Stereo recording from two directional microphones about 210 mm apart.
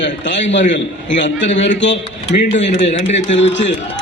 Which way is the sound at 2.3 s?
35° left (ahead or behind).